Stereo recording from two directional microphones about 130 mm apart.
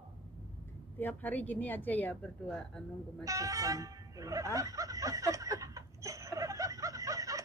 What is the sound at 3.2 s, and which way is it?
Music, 25° right (ahead or behind).